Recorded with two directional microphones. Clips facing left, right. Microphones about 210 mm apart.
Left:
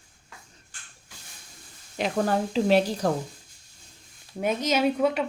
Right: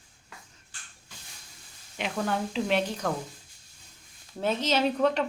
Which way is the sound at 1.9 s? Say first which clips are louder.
Left 5 dB; 40° left (ahead or behind).